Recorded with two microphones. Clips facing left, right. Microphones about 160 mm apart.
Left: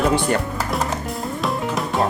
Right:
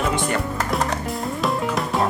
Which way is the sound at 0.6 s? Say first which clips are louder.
Even; centre (ahead or behind).